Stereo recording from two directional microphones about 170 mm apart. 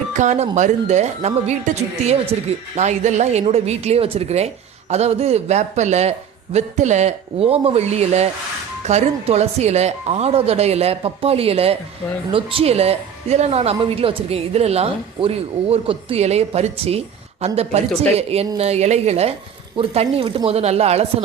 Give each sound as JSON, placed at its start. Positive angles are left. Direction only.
{"t": 0.1, "sound": "a woman's voice", "side_deg": -45}